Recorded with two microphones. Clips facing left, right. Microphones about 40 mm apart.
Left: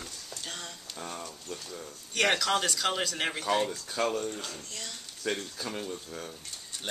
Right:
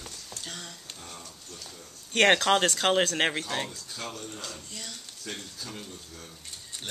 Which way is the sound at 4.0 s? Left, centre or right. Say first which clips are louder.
Left 10 dB; left.